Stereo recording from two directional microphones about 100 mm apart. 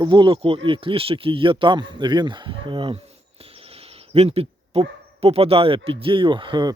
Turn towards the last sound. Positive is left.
turn(degrees=-50)  # may be behind; listen again after turning